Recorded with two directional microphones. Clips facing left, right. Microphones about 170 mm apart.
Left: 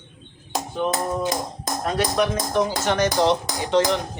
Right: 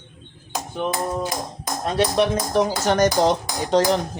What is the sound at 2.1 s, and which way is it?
Speech, 35° right (ahead or behind).